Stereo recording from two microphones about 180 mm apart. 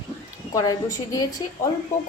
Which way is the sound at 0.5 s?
20° left (ahead or behind).